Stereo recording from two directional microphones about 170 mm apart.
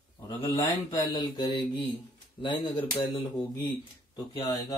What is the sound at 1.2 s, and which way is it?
Speech, 25° left (ahead or behind).